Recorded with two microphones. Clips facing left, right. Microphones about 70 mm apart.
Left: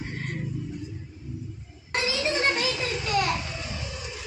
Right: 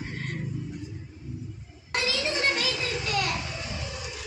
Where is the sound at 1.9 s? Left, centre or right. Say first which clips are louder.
Left 2 dB; left.